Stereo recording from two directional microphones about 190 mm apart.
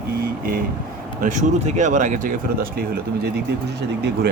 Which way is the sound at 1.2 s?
40° right (ahead or behind).